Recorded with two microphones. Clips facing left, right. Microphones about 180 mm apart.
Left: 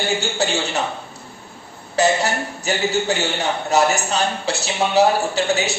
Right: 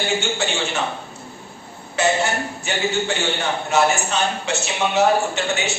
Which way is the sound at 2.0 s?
35° left (ahead or behind).